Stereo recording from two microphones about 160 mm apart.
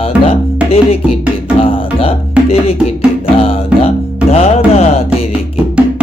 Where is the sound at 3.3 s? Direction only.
35° left (ahead or behind).